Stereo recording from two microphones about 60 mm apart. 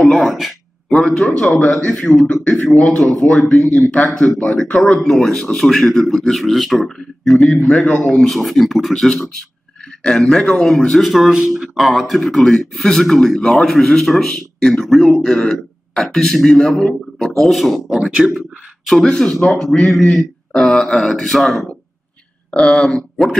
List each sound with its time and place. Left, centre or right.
0.0 s speech: centre
0.9 s a man's voice: centre
5.1 s speech: centre
7.8 s speech: left
8.1 s a man's voice: centre
18.1 s speech: centre
18.9 s a man's voice: centre
19.6 s a man's voice: centre
22.5 s speech: centre